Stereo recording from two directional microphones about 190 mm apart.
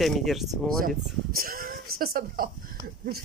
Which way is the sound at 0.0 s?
Centre (ahead or behind).